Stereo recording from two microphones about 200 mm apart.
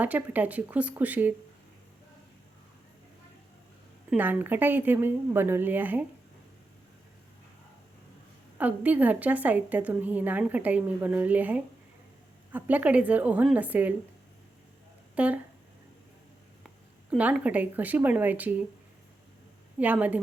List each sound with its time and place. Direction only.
0.0 s a woman's voice: 10° right (ahead or behind)
4.1 s a woman's voice: 10° right (ahead or behind)
8.5 s a woman's voice: 10° right (ahead or behind)
15.1 s speech: 5° right (ahead or behind)
17.1 s a woman's voice: 5° right (ahead or behind)
19.8 s a woman's voice: 10° right (ahead or behind)